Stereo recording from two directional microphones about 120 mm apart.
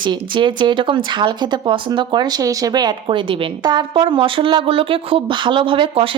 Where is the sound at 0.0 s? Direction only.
40° right (ahead or behind).